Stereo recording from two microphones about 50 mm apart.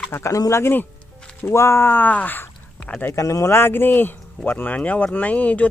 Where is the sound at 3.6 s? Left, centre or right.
Left.